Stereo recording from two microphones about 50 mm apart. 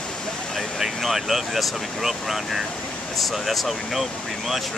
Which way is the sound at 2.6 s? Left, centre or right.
Left.